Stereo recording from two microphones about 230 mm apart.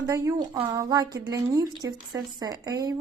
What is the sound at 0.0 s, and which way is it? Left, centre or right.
A woman's voice, centre.